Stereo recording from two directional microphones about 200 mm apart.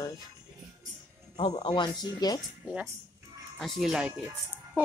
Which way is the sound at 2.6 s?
5° right (ahead or behind).